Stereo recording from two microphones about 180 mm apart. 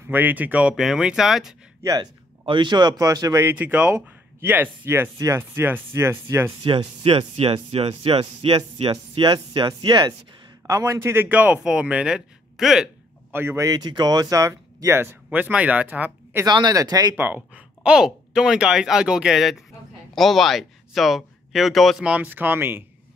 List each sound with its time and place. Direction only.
0.0 s speech: 10° right (ahead or behind)
1.8 s speech: 20° right (ahead or behind)
6.6 s a man's voice: 25° right (ahead or behind); by 16.4 s 10° right (ahead or behind)
16.4 s speech: 25° right (ahead or behind)
17.1 s speech: 10° right (ahead or behind)